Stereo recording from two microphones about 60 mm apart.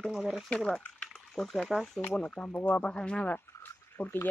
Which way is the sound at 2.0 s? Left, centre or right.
Left.